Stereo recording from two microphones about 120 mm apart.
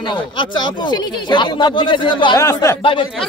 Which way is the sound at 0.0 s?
40° left (ahead or behind).